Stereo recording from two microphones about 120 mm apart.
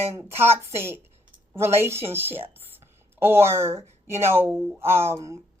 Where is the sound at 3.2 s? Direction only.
20° right (ahead or behind).